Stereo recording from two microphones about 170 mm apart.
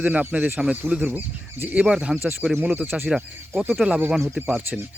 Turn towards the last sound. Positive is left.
turn(degrees=-5)  # may be behind; listen again after turning